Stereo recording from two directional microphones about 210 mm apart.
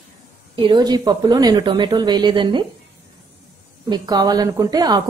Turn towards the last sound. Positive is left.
turn(degrees=-20)  # may be behind; listen again after turning